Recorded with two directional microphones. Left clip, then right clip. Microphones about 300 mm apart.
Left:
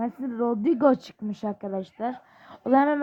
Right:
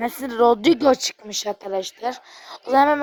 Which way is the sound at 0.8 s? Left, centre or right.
Centre.